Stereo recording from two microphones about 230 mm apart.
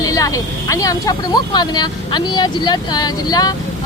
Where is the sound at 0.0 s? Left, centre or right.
Centre.